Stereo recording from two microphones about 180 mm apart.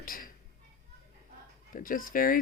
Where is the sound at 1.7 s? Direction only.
50° left (ahead or behind).